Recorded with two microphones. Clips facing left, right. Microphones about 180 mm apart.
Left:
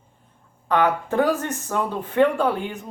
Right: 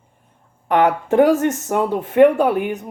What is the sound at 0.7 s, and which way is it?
Speech, 20° right (ahead or behind).